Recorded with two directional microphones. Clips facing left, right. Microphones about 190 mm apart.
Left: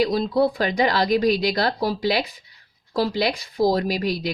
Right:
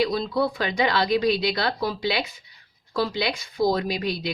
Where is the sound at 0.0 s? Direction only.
40° left (ahead or behind).